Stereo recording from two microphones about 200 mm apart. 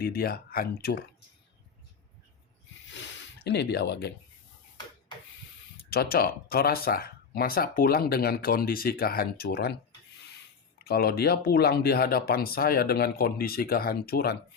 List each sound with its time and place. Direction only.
0.0 s speech: 50° left (ahead or behind)
2.9 s a sound: 65° left (ahead or behind)
5.9 s speech: 50° left (ahead or behind)
10.8 s speech: 50° left (ahead or behind)